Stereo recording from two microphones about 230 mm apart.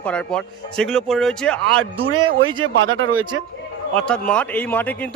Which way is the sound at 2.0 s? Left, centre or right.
Right.